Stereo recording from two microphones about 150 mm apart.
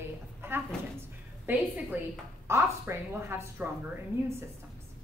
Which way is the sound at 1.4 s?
10° right (ahead or behind).